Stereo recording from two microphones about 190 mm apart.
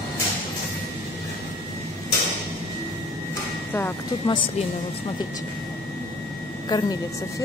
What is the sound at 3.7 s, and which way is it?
Speech, 15° left (ahead or behind).